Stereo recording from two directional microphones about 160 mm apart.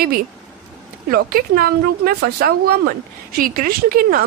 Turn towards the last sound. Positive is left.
turn(degrees=-65)  # may be behind; listen again after turning